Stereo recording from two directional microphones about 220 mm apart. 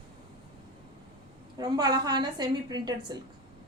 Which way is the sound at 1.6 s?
20° right (ahead or behind).